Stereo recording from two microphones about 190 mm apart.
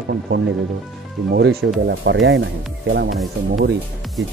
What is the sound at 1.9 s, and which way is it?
Speech, 70° right (ahead or behind).